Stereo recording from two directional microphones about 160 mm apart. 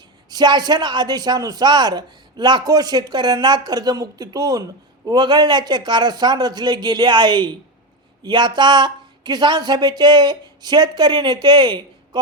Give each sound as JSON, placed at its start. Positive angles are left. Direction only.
{"t": 0.3, "sound": "a man's voice", "side_deg": -25}